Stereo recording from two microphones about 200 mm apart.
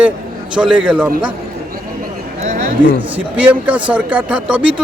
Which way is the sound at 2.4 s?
35° right (ahead or behind).